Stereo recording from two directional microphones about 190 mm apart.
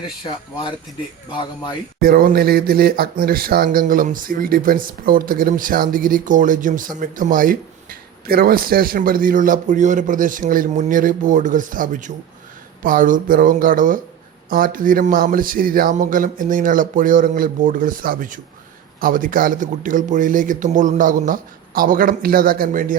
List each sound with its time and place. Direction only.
1.3 s speech: 25° left (ahead or behind)
2.0 s speech: 50° right (ahead or behind)